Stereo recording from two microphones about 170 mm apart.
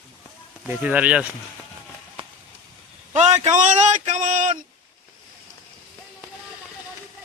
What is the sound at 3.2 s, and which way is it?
Speech, 45° right (ahead or behind).